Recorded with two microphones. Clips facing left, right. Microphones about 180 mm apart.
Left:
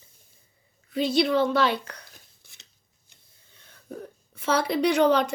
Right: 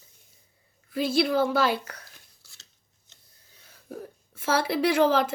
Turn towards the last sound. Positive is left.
turn(degrees=-5)  # may be behind; listen again after turning